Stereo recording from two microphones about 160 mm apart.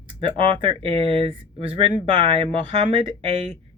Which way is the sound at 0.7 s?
35° right (ahead or behind).